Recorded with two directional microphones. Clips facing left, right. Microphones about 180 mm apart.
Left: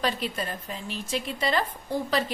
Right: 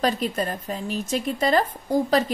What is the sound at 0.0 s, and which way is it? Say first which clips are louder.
A woman's voice: right 5 dB; 45° right (ahead or behind).